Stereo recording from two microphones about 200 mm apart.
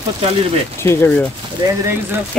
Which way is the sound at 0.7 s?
15° left (ahead or behind).